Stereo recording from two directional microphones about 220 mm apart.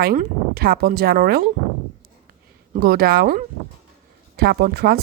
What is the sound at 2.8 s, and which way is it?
Speech, 45° right (ahead or behind).